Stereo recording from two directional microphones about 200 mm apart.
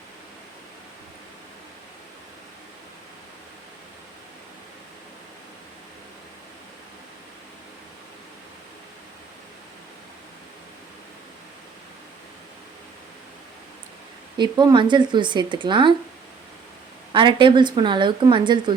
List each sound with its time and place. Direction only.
14.3 s speech: 20° right (ahead or behind)
17.1 s speech: 25° right (ahead or behind)